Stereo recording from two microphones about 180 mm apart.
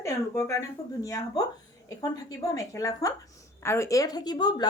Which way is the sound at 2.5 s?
20° left (ahead or behind).